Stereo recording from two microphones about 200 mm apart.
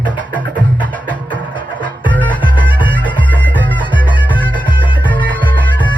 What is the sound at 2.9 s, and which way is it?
Bagpipes, 10° left (ahead or behind).